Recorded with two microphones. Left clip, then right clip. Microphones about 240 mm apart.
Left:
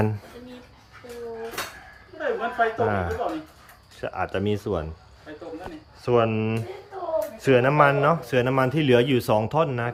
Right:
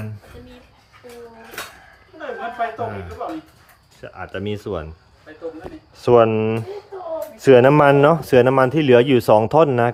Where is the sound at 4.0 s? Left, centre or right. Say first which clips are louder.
Left 3 dB; centre.